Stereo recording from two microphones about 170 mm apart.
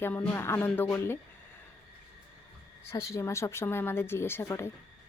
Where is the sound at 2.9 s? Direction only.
15° left (ahead or behind).